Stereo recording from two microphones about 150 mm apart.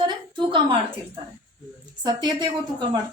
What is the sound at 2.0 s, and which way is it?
Speech, 30° right (ahead or behind).